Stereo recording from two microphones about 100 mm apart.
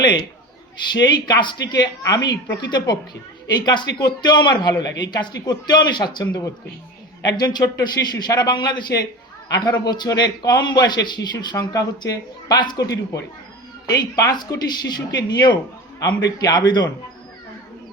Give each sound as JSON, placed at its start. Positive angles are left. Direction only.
{"t": 0.9, "sound": "a man's voice", "side_deg": 45}